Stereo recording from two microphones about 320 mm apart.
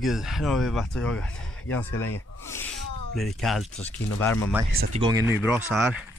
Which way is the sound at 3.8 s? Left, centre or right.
Centre.